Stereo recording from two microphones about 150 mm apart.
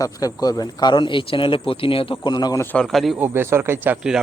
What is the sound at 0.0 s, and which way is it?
Speech, 25° left (ahead or behind).